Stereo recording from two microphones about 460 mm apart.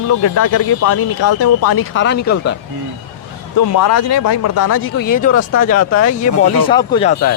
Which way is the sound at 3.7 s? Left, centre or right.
Left.